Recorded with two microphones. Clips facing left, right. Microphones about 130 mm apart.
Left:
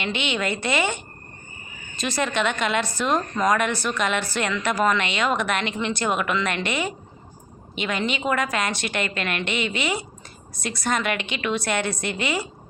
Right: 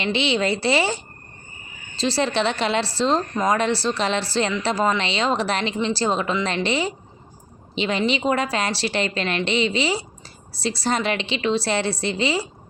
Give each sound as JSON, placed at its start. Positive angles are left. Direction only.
{"t": 0.0, "sound": "a woman's voice", "side_deg": -30}